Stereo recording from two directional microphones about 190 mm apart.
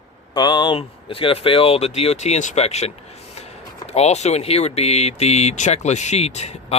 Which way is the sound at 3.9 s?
35° left (ahead or behind).